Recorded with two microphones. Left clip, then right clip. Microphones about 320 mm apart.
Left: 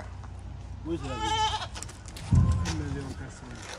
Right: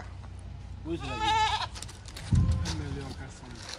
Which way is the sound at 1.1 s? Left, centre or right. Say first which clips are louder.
Right 2 dB; centre.